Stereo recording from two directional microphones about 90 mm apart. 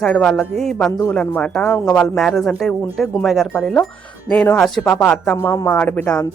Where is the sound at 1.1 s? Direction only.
15° left (ahead or behind).